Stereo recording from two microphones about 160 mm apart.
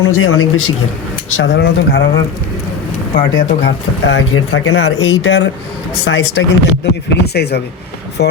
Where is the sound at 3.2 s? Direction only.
60° left (ahead or behind).